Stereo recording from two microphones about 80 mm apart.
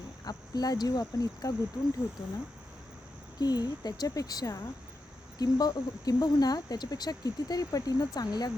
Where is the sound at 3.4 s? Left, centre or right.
Left.